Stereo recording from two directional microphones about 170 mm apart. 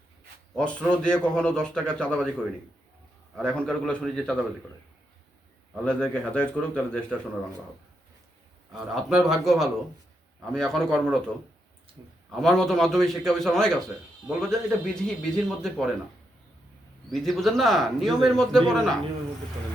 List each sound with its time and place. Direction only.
0.5 s a man's voice: 5° left (ahead or behind)
3.3 s a man's voice: 5° left (ahead or behind)
5.8 s speech: 5° left (ahead or behind)
8.7 s a man's voice: 5° right (ahead or behind)
12.3 s a man's voice: centre (ahead or behind)
17.1 s a man's voice: centre (ahead or behind)